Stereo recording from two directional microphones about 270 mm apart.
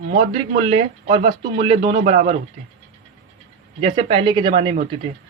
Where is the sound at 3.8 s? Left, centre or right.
Right.